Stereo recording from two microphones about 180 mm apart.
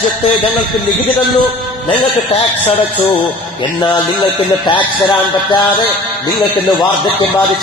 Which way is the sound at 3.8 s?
25° left (ahead or behind).